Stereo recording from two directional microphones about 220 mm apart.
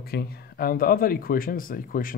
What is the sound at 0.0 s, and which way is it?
Speech, 45° left (ahead or behind).